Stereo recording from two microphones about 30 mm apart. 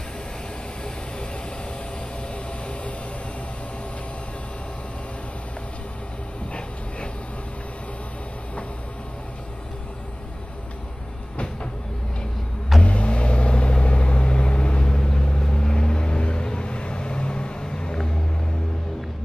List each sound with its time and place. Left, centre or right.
2.3 s vehicle: left
12.8 s vehicle: left